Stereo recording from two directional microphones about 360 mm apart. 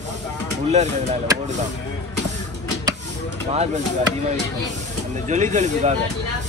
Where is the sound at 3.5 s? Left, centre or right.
Centre.